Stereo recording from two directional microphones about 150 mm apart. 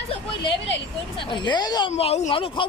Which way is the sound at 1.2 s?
30° left (ahead or behind).